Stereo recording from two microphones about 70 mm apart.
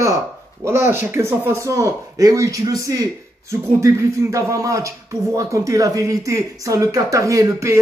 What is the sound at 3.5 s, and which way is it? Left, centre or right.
Speech, right.